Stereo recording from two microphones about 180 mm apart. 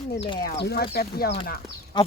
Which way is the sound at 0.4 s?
65° left (ahead or behind).